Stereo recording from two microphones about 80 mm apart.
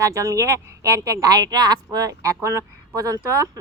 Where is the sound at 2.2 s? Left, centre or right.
Right.